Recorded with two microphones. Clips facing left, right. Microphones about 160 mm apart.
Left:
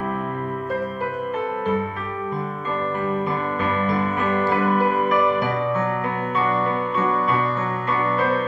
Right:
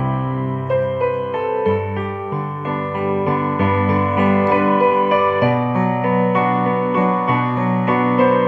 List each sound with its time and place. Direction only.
4.2 s music: 10° right (ahead or behind)
6.1 s music: 50° right (ahead or behind)
8.2 s music: 50° right (ahead or behind)